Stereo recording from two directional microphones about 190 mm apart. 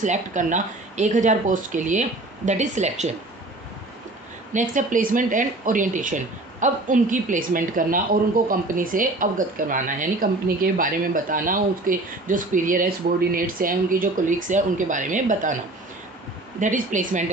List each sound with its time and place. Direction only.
0.0 s speech: 40° right (ahead or behind)
4.5 s speech: 45° right (ahead or behind)
16.6 s speech: 40° right (ahead or behind)